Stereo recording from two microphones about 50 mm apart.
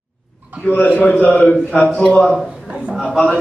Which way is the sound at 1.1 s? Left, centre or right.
Left.